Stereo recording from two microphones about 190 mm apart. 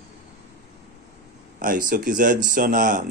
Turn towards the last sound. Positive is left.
turn(degrees=-45)  # may be behind; listen again after turning